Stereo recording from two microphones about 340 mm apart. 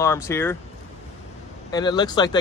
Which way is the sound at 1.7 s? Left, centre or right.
Centre.